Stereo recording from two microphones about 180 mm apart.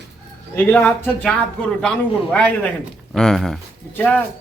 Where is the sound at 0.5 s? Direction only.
10° left (ahead or behind).